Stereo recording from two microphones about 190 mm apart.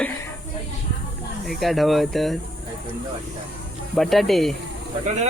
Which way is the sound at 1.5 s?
Centre (ahead or behind).